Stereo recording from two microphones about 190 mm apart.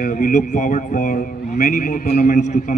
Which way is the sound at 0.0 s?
45° left (ahead or behind).